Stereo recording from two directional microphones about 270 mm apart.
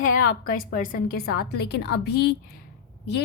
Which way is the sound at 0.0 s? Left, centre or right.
Left.